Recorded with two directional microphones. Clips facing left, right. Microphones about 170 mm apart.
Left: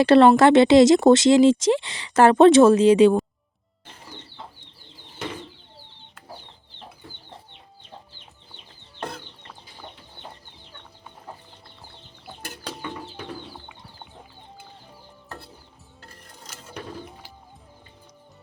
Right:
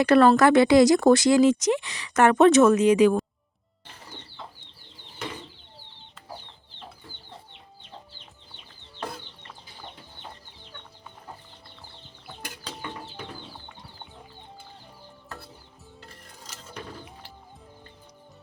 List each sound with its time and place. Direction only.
0.0 s speech: 25° left (ahead or behind)